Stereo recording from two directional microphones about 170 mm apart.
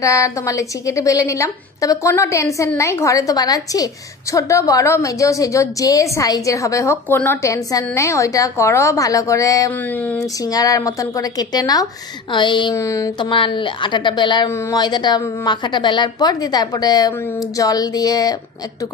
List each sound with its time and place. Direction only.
0.0 s a woman's voice: 20° left (ahead or behind)